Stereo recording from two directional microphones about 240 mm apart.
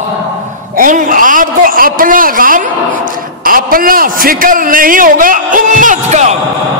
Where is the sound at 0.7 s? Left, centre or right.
Right.